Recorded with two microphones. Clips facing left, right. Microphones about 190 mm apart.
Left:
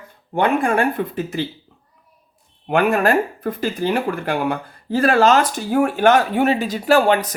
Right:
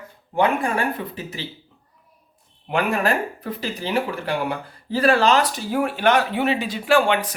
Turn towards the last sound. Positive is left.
turn(degrees=40)  # may be behind; listen again after turning